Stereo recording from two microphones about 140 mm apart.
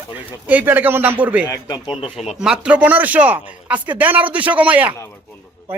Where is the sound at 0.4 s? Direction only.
10° right (ahead or behind).